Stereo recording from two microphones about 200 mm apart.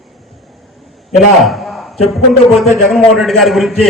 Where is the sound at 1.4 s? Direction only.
Centre (ahead or behind).